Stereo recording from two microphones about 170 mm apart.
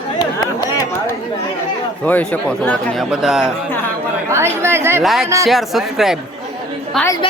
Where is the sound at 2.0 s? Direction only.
10° left (ahead or behind).